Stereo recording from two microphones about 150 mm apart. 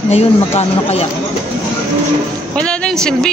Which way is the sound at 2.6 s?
5° left (ahead or behind).